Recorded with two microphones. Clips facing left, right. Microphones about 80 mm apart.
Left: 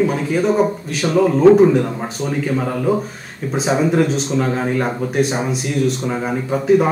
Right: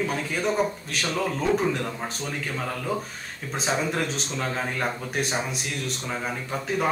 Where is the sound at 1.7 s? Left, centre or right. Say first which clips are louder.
Left 11 dB; centre.